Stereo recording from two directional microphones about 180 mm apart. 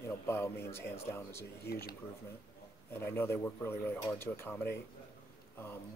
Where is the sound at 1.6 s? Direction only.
60° left (ahead or behind).